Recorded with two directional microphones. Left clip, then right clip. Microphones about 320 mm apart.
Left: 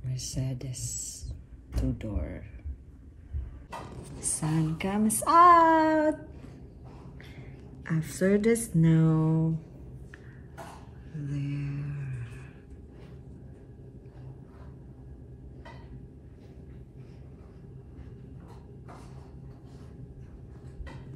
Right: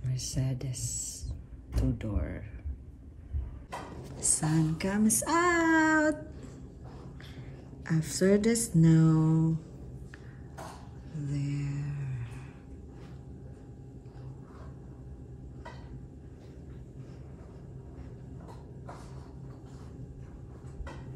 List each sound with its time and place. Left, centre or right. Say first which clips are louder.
0.0 s speech: even; centre
4.0 s speech: right 5 dB; right
4.9 s speech: left 8 dB; centre
7.8 s speech: even; centre
11.2 s mantra: even; centre